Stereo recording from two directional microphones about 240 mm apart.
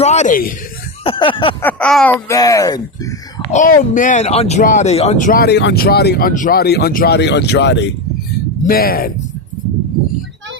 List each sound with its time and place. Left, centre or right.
0.0 s speech: left
1.0 s speech: left
1.6 s speech: centre
3.5 s speech: left